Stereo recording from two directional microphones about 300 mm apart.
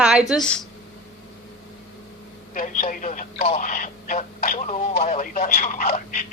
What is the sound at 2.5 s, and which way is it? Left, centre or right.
Speech, left.